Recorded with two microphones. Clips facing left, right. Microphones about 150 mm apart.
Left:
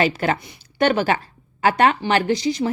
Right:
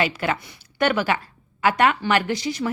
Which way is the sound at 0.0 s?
35° left (ahead or behind).